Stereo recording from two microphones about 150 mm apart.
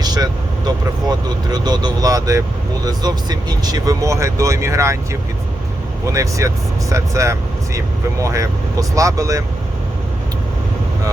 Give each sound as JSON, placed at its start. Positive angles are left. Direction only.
{"t": 0.0, "sound": "speech", "side_deg": -25}
{"t": 6.1, "sound": "speech", "side_deg": -20}